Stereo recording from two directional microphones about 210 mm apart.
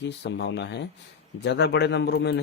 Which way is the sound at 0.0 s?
55° left (ahead or behind).